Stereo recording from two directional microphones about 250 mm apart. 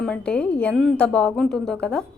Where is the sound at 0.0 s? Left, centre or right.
Centre.